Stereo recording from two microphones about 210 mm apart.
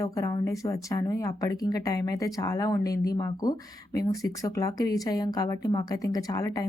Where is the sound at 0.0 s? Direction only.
15° left (ahead or behind).